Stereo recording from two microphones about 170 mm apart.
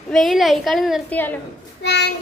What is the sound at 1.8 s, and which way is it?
Child singing, 90° left.